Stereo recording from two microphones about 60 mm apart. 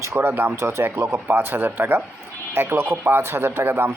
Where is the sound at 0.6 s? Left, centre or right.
Right.